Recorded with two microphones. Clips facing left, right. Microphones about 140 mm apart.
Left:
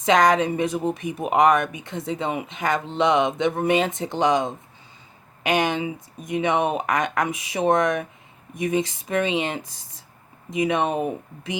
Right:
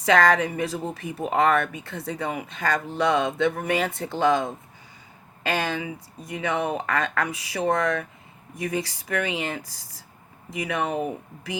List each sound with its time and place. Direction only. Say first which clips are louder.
0.0 s speech: left 2 dB; 20° left (ahead or behind)